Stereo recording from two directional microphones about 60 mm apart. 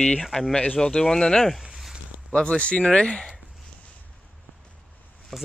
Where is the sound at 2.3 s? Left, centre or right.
Centre.